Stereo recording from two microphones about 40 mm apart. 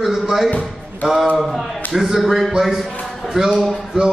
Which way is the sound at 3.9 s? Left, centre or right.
Centre.